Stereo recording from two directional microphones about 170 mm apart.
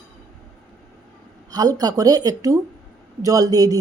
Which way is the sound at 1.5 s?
20° right (ahead or behind).